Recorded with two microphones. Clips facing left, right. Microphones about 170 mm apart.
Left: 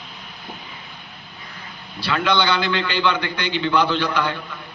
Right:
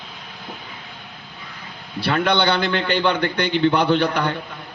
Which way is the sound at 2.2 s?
55° right (ahead or behind).